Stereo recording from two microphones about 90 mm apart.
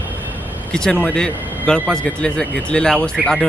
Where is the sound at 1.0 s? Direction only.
10° left (ahead or behind).